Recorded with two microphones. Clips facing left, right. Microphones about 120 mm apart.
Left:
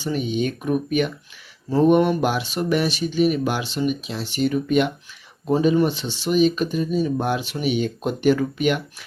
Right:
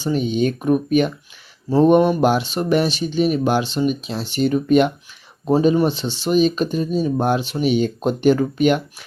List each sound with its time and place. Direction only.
0.0 s speech: 30° right (ahead or behind)